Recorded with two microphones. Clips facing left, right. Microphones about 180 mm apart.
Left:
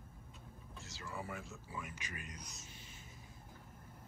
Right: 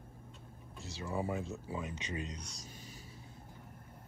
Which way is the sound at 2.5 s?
40° right (ahead or behind).